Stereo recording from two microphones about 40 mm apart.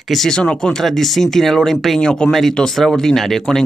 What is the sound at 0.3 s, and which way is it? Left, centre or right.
Speech, centre.